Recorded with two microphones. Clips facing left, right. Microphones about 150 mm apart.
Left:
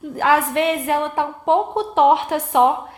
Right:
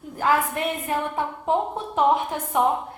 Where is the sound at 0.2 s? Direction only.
90° left.